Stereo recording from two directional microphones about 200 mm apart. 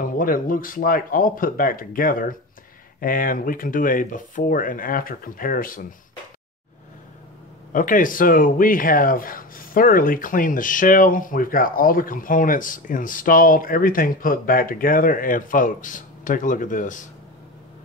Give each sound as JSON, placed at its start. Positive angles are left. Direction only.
{"t": 0.0, "sound": "speech", "side_deg": 45}
{"t": 7.7, "sound": "speech", "side_deg": 40}